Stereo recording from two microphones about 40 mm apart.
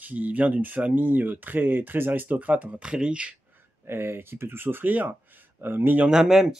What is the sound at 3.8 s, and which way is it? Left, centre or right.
Speech, right.